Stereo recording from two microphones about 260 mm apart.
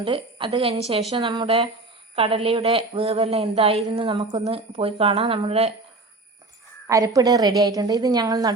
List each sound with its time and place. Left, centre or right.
0.0 s speech: centre
6.8 s a woman's voice: centre